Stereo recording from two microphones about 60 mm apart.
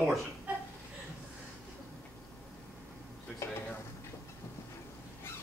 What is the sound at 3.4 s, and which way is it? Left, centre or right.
Dishes, left.